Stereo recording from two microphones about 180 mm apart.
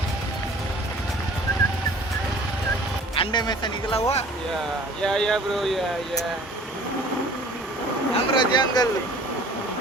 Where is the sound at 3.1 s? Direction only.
25° left (ahead or behind).